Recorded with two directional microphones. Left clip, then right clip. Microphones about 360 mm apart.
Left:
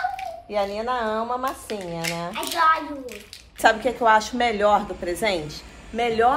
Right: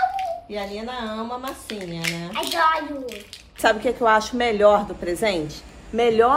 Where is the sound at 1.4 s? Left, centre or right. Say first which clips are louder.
Left 4 dB; left.